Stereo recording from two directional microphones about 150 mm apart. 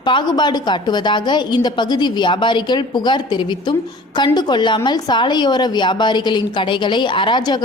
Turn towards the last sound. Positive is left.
turn(degrees=30)  # may be behind; listen again after turning